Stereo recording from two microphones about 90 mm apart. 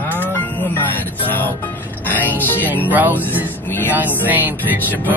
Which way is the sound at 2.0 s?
20° left (ahead or behind).